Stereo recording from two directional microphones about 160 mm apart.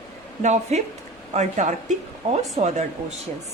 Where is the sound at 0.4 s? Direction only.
45° right (ahead or behind).